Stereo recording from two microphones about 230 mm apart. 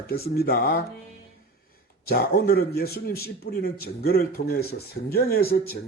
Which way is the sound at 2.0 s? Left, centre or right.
Left.